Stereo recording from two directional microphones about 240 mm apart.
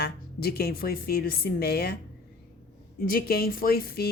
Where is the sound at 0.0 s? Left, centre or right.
Left.